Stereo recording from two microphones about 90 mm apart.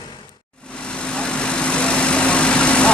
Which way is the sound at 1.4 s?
10° left (ahead or behind).